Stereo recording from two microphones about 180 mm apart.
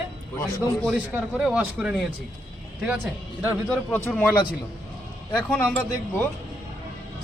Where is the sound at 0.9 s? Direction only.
5° right (ahead or behind).